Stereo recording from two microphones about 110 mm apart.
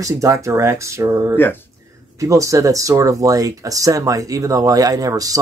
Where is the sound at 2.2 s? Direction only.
30° right (ahead or behind).